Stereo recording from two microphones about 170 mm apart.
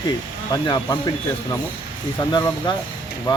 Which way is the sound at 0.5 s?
25° left (ahead or behind).